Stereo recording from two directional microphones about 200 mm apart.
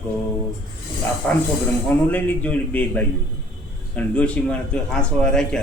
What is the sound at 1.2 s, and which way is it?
A man's voice, 5° left (ahead or behind).